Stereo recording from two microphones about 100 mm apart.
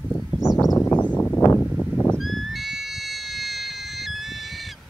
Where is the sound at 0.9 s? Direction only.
15° left (ahead or behind).